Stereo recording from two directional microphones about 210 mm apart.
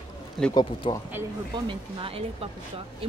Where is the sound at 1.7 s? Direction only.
25° right (ahead or behind).